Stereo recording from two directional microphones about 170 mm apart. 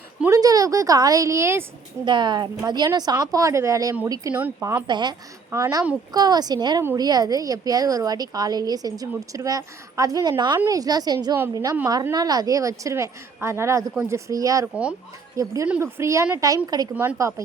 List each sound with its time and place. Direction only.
0.3 s a woman's voice: 20° right (ahead or behind)
2.0 s a woman's voice: 25° right (ahead or behind); by 4.8 s 10° right (ahead or behind)
4.9 s a woman's voice: 25° right (ahead or behind)
16.9 s speech: 10° right (ahead or behind)